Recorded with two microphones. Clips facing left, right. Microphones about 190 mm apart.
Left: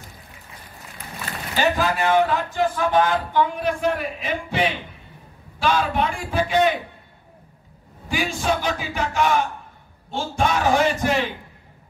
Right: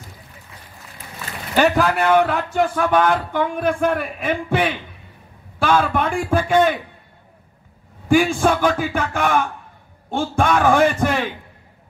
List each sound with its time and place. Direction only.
1.5 s a man's voice: 65° right (ahead or behind)
8.1 s a man's voice: 50° right (ahead or behind)